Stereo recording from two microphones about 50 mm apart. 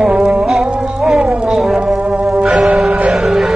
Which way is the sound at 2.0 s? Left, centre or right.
Right.